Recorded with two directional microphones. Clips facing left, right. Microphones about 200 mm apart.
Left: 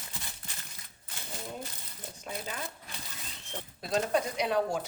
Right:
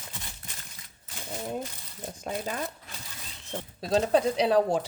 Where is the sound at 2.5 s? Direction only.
45° right (ahead or behind).